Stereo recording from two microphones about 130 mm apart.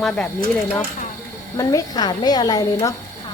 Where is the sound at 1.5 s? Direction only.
30° left (ahead or behind).